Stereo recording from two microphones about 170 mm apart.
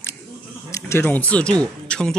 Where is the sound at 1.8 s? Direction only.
5° left (ahead or behind).